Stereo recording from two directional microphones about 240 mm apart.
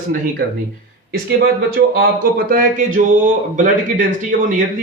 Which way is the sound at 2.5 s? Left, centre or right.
Right.